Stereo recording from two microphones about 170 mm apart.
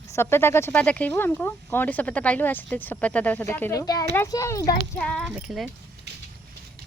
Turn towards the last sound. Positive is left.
turn(degrees=0)  # may be behind; listen again after turning